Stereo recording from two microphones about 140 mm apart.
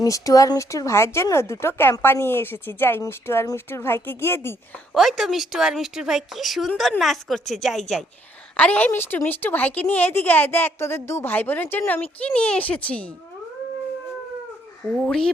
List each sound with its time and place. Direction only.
0.0 s speech: 25° left (ahead or behind)
4.9 s a woman's voice: centre (ahead or behind)
14.9 s a woman's voice: 5° left (ahead or behind)